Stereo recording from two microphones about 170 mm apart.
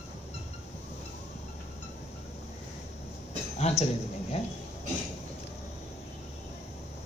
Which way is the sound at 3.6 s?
40° left (ahead or behind).